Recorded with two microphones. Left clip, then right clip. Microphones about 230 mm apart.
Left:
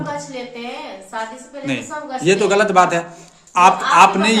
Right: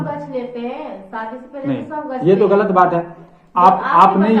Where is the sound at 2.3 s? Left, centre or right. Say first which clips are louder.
Right 1 dB; left.